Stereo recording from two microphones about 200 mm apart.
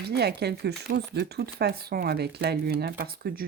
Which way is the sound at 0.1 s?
55° right (ahead or behind).